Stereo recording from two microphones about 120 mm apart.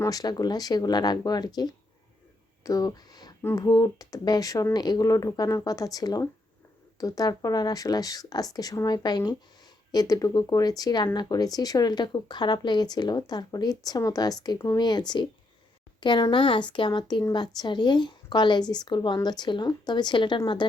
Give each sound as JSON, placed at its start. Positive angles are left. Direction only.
{"t": 0.0, "sound": "speech", "side_deg": 30}